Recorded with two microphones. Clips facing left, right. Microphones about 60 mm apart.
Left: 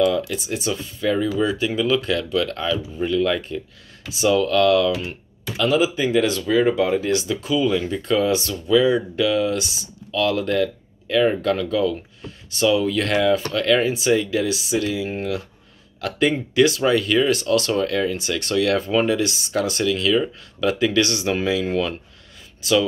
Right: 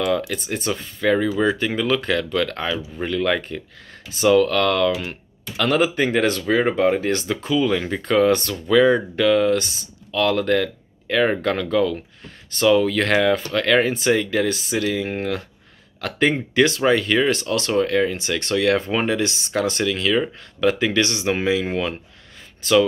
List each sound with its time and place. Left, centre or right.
0.3 s speech: right
5.6 s speech: right
16.0 s speech: right
22.6 s speech: right